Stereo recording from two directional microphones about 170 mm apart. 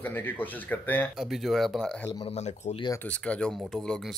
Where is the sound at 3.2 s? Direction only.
5° left (ahead or behind).